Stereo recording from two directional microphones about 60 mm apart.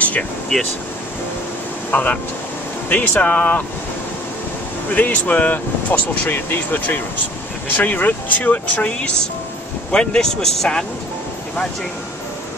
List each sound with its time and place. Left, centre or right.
0.5 s speech: centre
1.9 s speech: left
4.9 s speech: left
9.8 s speech: centre